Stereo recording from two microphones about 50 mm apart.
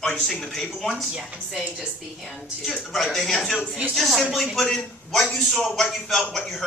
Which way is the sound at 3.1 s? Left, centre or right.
Centre.